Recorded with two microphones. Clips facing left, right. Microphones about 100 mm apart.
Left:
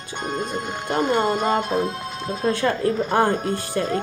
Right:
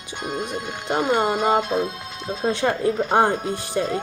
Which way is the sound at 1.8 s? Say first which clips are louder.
Left 2 dB; 55° left (ahead or behind).